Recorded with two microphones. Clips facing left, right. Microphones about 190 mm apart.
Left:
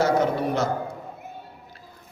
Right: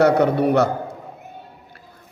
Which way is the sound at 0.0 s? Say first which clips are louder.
Right 6 dB; 65° right (ahead or behind).